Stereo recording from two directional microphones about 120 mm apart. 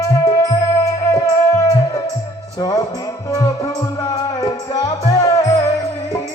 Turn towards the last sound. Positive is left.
turn(degrees=30)  # may be behind; listen again after turning